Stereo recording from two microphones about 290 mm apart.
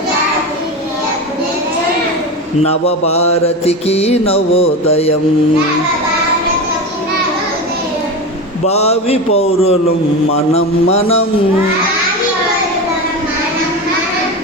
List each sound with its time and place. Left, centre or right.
2.6 s mantra: left
8.6 s mantra: left